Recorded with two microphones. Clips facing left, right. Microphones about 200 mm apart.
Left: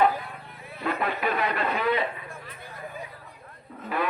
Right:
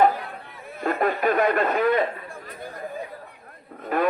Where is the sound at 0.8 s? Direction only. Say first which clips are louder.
Right 5 dB; 45° right (ahead or behind).